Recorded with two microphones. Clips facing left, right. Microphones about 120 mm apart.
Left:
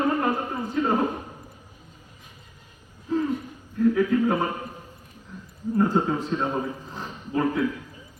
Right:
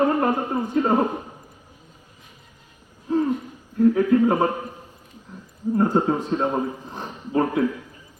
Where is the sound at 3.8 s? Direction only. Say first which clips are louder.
Right 4 dB; 35° right (ahead or behind).